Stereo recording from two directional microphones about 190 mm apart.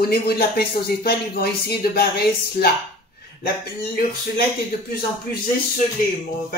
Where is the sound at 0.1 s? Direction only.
55° left (ahead or behind).